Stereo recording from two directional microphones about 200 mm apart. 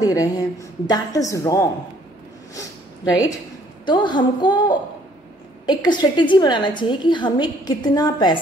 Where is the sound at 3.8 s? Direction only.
20° left (ahead or behind).